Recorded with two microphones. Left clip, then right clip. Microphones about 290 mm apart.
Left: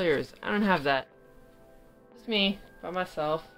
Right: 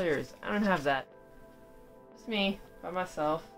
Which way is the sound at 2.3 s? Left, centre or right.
Left.